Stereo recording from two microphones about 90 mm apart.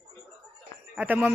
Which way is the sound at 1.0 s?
20° right (ahead or behind).